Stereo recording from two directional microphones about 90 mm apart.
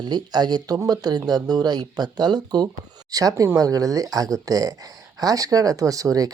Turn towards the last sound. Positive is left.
turn(degrees=-40)  # may be behind; listen again after turning